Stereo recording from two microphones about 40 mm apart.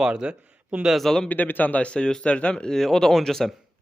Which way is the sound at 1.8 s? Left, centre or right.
Left.